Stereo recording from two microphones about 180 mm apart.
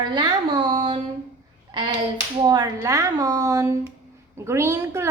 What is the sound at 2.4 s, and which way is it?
A woman's voice, 20° right (ahead or behind).